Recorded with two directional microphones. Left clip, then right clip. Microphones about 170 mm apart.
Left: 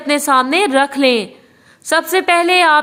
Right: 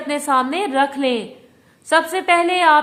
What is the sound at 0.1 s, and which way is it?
A woman's voice, 30° left (ahead or behind).